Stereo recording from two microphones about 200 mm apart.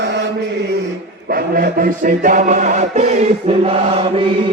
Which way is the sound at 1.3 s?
50° right (ahead or behind).